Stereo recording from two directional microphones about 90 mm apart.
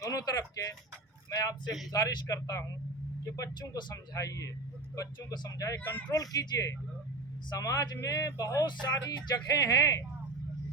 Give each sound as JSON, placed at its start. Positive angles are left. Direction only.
{"t": 0.0, "sound": "speech", "side_deg": 40}
{"t": 3.9, "sound": "speech", "side_deg": 40}